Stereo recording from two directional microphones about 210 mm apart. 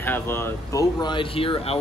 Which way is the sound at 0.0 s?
10° left (ahead or behind).